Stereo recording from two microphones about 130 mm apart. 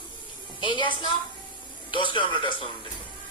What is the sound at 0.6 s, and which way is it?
A woman's voice, 40° left (ahead or behind).